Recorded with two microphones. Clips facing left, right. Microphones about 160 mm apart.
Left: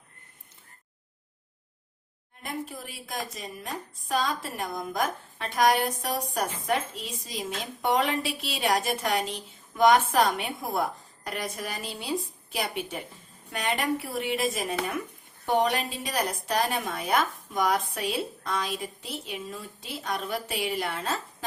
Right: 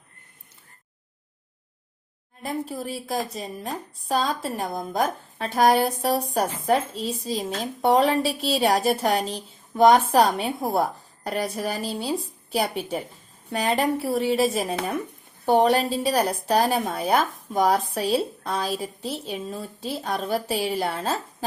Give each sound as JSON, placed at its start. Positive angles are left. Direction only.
{"t": 2.4, "sound": "speech", "side_deg": -35}